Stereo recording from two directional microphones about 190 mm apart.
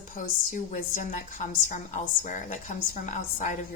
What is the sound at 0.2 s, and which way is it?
A woman's voice, 45° left (ahead or behind).